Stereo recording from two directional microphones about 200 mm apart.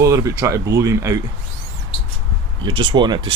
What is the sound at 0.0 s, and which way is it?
Speech, 15° right (ahead or behind).